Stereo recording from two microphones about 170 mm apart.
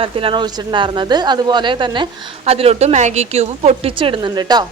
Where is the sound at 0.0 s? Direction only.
30° right (ahead or behind).